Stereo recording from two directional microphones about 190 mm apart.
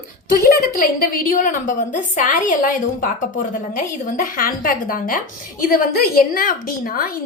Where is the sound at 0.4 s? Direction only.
50° left (ahead or behind).